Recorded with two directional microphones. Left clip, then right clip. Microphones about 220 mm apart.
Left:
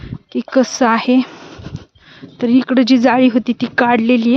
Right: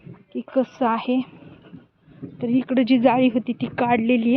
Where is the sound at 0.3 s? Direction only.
55° left (ahead or behind).